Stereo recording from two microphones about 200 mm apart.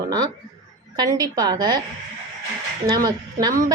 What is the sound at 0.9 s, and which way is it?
Speech, 20° right (ahead or behind).